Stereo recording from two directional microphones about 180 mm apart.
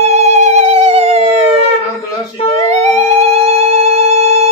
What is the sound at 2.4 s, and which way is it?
Music, 30° left (ahead or behind).